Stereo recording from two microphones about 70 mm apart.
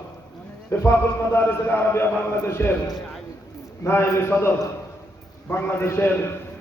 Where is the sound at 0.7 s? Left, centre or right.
Left.